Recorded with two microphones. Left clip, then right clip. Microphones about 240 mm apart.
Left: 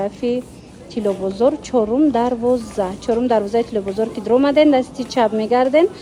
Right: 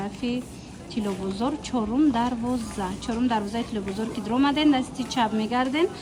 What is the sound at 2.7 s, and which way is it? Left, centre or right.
Speech, left.